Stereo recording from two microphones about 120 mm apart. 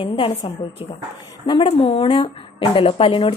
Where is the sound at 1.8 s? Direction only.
65° left (ahead or behind).